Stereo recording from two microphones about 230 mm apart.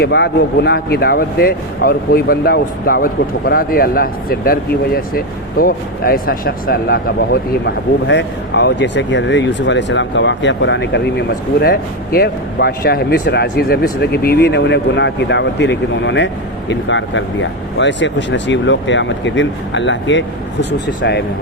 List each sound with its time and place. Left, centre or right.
0.0 s speech: left